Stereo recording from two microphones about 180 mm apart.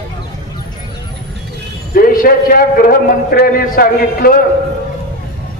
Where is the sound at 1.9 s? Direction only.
55° left (ahead or behind).